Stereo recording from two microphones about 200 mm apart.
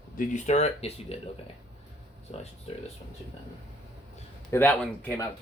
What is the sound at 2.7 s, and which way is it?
Speech, 30° left (ahead or behind).